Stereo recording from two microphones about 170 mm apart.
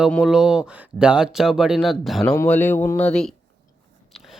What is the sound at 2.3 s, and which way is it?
Speech, 10° left (ahead or behind).